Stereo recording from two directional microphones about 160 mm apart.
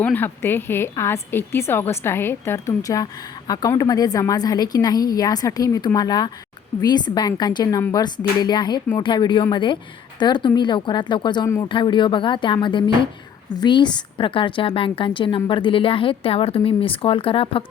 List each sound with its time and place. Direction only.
0.0 s a woman's voice: 10° left (ahead or behind); by 17.6 s 35° left (ahead or behind)